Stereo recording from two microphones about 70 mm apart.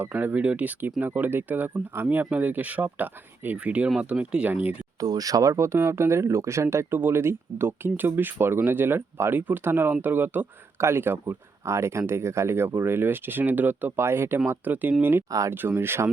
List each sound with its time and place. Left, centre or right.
0.0 s speech: right
4.9 s speech: right